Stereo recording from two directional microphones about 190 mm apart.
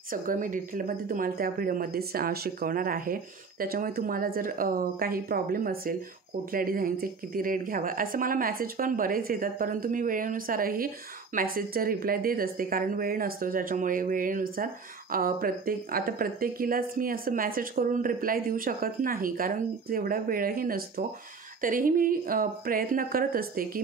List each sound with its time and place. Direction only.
0.1 s speech: 45° right (ahead or behind)